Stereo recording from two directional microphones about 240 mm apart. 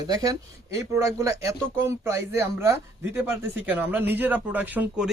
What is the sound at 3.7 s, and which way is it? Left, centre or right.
Speech, centre.